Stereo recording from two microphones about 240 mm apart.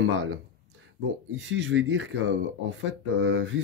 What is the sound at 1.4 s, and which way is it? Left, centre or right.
Speech, right.